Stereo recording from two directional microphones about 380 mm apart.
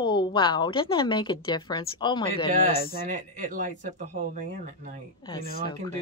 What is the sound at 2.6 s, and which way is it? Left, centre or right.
Speech, left.